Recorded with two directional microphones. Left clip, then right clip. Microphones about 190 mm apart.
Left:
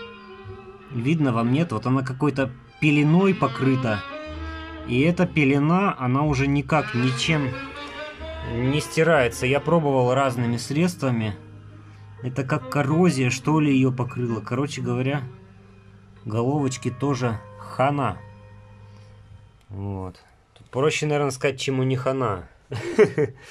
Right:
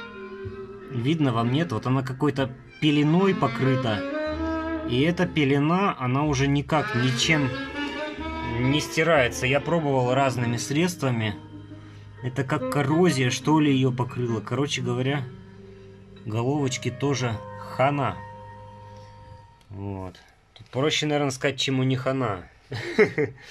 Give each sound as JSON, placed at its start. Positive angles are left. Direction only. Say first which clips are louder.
{"t": 1.0, "sound": "speech", "louder": "left 1 dB", "side_deg": 0}
{"t": 4.8, "sound": "speech", "louder": "left 4 dB", "side_deg": 5}
{"t": 6.9, "sound": "speech", "louder": "even", "side_deg": -35}
{"t": 7.2, "sound": "speech", "louder": "right 4 dB", "side_deg": 0}
{"t": 7.5, "sound": "music", "louder": "right 3 dB", "side_deg": -35}
{"t": 8.7, "sound": "speech", "louder": "left 2 dB", "side_deg": 5}
{"t": 16.3, "sound": "speech", "louder": "left 2 dB", "side_deg": 5}
{"t": 19.8, "sound": "speech", "louder": "left 1 dB", "side_deg": 5}